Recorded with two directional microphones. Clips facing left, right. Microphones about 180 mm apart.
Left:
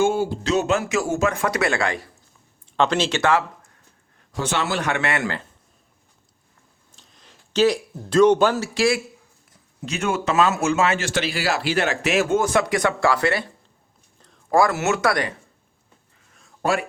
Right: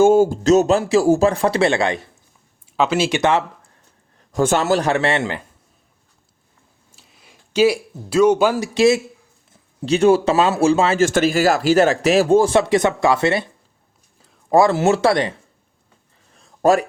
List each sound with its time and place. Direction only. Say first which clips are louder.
0.0 s speech: right 8 dB; 45° right (ahead or behind); by 2.0 s 25° right (ahead or behind)
2.7 s speech: right 2 dB; 5° right (ahead or behind); by 3.7 s 20° right (ahead or behind)
4.3 s speech: right 8 dB; 45° right (ahead or behind); by 5.4 s 25° right (ahead or behind)
6.9 s speech: right 1 dB; 10° right (ahead or behind)
9.5 s speech: right 12 dB; 30° right (ahead or behind)
11.0 s speech: right 9 dB; 45° right (ahead or behind); by 13.4 s 25° right (ahead or behind)
14.5 s speech: right 5 dB; 25° right (ahead or behind)
16.3 s a sound: right 8 dB; 35° right (ahead or behind)